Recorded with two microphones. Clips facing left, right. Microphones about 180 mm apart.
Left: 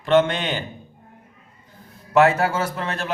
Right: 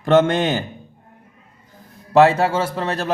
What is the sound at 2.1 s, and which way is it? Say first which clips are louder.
A man's voice: right 3 dB; 30° right (ahead or behind).